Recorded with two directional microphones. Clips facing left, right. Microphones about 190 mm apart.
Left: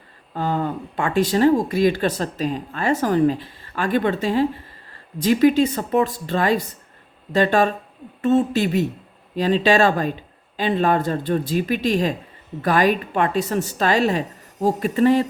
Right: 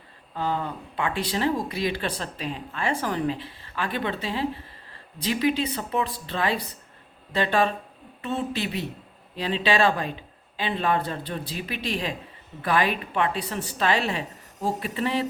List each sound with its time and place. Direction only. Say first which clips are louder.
0.3 s speech: left 5 dB; 45° left (ahead or behind)